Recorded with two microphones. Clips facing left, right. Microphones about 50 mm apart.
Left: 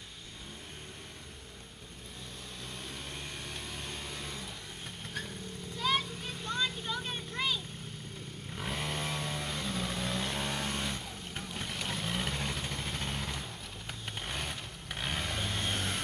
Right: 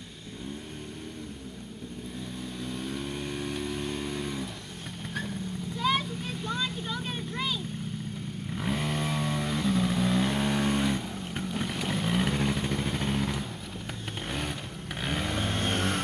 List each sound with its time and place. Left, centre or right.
2.6 s vehicle: centre
5.8 s vehicle: centre
15.6 s vehicle: right